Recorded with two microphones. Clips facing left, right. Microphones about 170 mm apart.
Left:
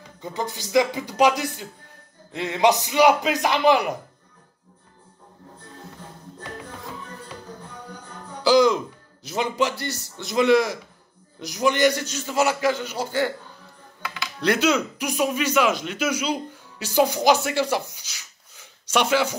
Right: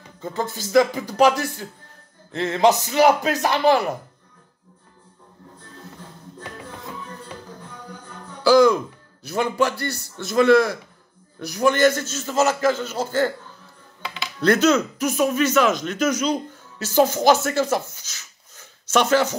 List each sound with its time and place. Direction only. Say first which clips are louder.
0.2 s a man's voice: right 2 dB; 15° left (ahead or behind)
8.5 s a man's voice: right 3 dB; 20° left (ahead or behind)
14.0 s music: right 1 dB; 25° right (ahead or behind)
14.4 s a man's voice: right 4 dB; 10° left (ahead or behind)
17.8 s a sound: right 1 dB; 15° left (ahead or behind)